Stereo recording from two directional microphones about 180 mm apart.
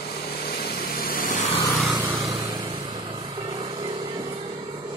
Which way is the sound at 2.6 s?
30° right (ahead or behind).